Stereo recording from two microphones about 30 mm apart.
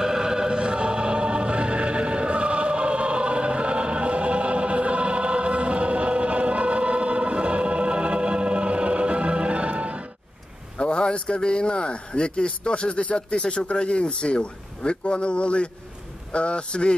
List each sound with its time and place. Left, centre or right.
0.0 s music: right
10.8 s speech: left